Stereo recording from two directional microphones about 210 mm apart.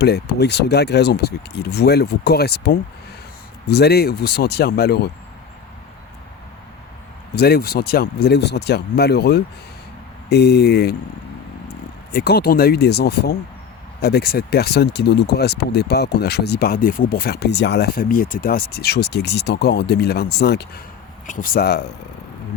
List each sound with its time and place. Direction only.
0.0 s speech: 50° left (ahead or behind)
7.3 s speech: 45° left (ahead or behind)
12.1 s speech: 50° left (ahead or behind)
21.2 s speech: 40° left (ahead or behind)